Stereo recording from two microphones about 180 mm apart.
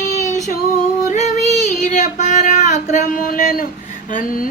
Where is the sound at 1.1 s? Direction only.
40° left (ahead or behind).